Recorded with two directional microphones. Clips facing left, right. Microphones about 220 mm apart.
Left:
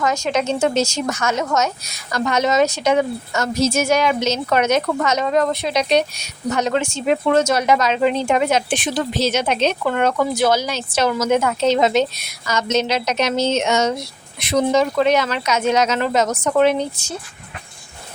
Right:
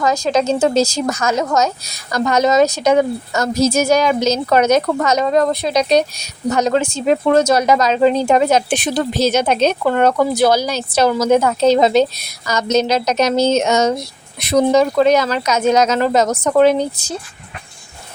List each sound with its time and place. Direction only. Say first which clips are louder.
0.0 s a woman's voice: right 4 dB; 35° right (ahead or behind)